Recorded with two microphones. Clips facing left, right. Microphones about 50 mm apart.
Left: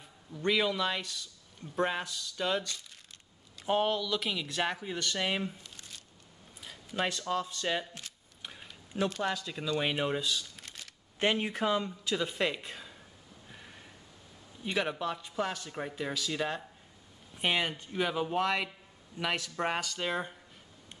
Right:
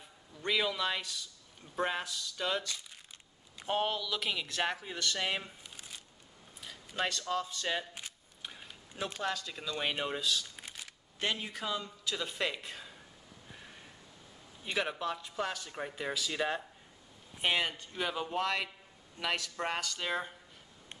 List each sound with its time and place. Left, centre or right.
0.4 s a man's voice: centre
5.6 s shuffling cards: centre
6.6 s speech: centre
7.4 s a man's voice: centre
8.4 s a sound: centre
9.2 s a man's voice: centre
10.5 s a sound: centre
11.1 s speech: left
12.1 s a man's voice: centre
14.6 s a man's voice: centre